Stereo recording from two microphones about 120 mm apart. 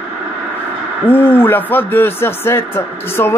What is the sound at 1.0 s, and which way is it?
Speech, 20° left (ahead or behind).